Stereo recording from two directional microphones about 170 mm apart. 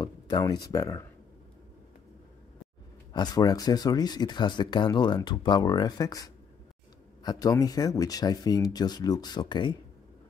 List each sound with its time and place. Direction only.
0.0 s a sound: 25° left (ahead or behind)
0.7 s speech: 20° left (ahead or behind)
3.1 s speech: 25° left (ahead or behind)